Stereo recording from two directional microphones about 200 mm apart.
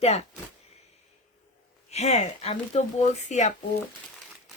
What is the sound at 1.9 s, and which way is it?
Speech, 30° left (ahead or behind).